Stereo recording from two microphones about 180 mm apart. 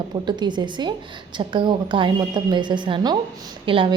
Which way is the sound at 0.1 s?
25° right (ahead or behind).